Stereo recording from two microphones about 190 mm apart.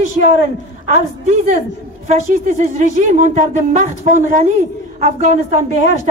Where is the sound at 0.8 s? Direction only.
40° right (ahead or behind).